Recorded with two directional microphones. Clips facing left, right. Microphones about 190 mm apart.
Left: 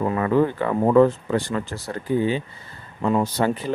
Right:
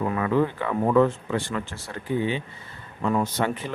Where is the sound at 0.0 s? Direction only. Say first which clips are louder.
Left 3 dB; 35° left (ahead or behind).